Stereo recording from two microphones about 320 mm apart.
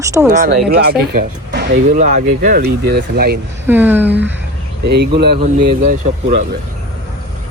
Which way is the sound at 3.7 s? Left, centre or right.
Centre.